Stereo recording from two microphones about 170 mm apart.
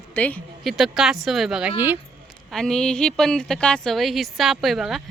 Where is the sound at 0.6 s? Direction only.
Centre (ahead or behind).